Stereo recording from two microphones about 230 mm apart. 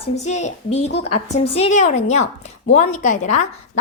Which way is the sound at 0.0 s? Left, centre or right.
Left.